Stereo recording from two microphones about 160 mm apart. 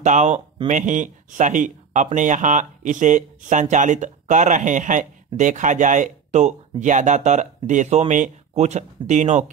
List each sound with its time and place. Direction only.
0.0 s speech: 50° right (ahead or behind)